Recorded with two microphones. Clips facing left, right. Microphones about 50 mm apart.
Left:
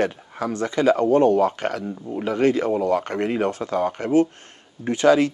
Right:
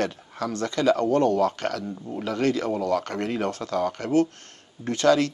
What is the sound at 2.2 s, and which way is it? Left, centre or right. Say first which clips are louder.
Speech: left 5 dB; left.